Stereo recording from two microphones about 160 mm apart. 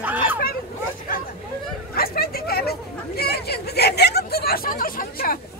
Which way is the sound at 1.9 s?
70° left (ahead or behind).